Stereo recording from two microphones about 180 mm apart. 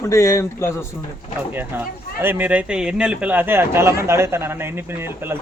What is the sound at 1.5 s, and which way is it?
Speech, 10° right (ahead or behind).